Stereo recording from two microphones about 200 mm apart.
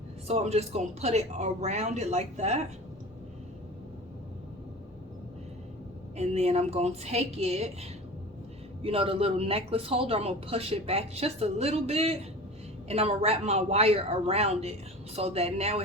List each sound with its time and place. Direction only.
0.3 s a woman's voice: 30° right (ahead or behind)
6.1 s a woman's voice: 35° right (ahead or behind)